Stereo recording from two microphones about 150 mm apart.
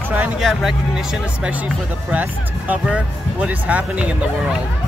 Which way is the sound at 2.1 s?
10° right (ahead or behind).